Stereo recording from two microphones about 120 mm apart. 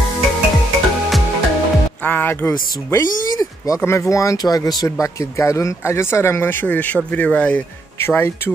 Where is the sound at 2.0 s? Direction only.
15° left (ahead or behind).